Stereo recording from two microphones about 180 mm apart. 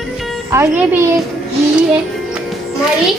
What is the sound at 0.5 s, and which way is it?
Speech, 15° right (ahead or behind).